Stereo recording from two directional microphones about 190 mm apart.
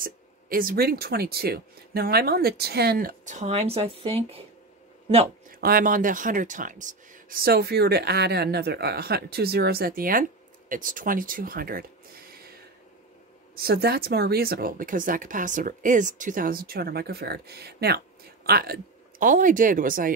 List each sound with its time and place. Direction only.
0.0 s speech: 50° right (ahead or behind); by 4.4 s 30° right (ahead or behind)
5.5 s speech: 50° right (ahead or behind)
13.6 s speech: 55° right (ahead or behind)